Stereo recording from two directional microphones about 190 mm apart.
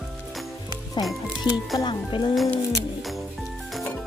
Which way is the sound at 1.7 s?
25° left (ahead or behind).